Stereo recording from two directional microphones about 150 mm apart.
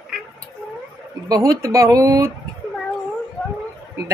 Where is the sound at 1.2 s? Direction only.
25° right (ahead or behind).